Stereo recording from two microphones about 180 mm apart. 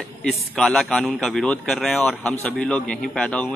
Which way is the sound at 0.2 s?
5° left (ahead or behind).